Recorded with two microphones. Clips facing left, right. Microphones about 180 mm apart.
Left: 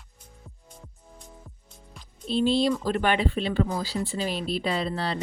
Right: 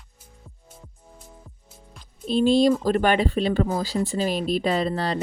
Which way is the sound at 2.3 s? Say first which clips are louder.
Right 5 dB; 45° right (ahead or behind).